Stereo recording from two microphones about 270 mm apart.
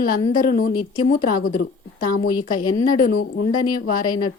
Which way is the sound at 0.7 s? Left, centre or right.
Left.